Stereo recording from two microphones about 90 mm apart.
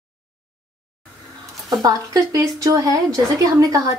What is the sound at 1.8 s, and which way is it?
A woman's voice, 40° right (ahead or behind).